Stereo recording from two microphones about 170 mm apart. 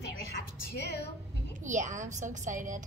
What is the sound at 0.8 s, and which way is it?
Speech, 75° left (ahead or behind).